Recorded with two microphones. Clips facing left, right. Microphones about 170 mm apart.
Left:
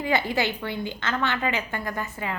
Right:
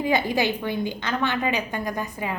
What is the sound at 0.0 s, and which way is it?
A woman's voice, 15° right (ahead or behind).